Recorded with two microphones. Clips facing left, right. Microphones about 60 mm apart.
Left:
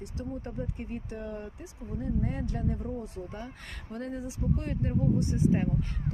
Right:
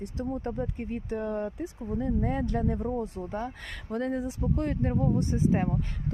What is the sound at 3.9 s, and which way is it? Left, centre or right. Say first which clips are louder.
Speech: right 6 dB; right.